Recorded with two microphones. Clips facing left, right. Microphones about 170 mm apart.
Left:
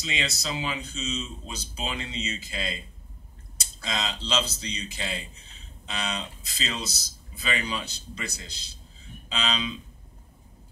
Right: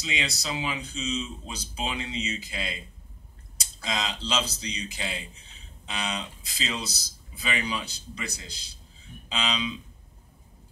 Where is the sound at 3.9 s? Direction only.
30° left (ahead or behind).